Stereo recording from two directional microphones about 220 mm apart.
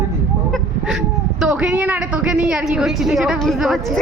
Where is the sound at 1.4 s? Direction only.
5° right (ahead or behind).